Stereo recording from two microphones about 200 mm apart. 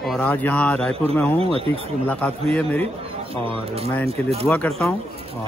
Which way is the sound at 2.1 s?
5° left (ahead or behind).